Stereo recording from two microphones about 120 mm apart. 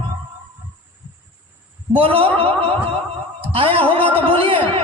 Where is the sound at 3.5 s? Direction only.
50° right (ahead or behind).